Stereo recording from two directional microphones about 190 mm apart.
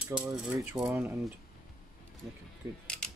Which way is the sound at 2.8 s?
5° left (ahead or behind).